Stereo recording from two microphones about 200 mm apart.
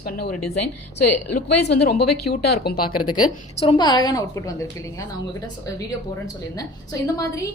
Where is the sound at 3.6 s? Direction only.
25° left (ahead or behind).